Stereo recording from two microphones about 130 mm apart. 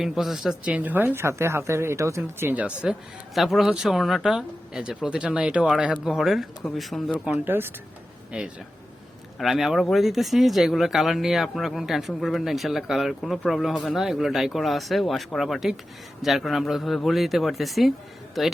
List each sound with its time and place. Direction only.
0.0 s a woman's voice: centre (ahead or behind)
7.3 s a woman's voice: 15° right (ahead or behind); by 18.5 s centre (ahead or behind)